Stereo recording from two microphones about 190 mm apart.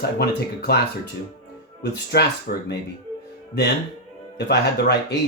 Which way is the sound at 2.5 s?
50° left (ahead or behind).